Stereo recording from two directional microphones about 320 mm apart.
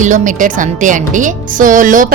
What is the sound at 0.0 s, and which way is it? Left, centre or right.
Speech, right.